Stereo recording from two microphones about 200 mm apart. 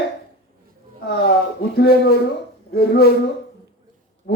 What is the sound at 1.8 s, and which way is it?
Speech, 50° left (ahead or behind).